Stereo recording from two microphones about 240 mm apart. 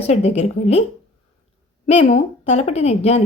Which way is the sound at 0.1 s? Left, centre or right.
Left.